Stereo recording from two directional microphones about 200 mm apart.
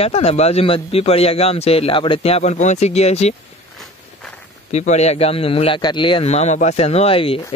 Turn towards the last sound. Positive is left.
turn(degrees=30)  # may be behind; listen again after turning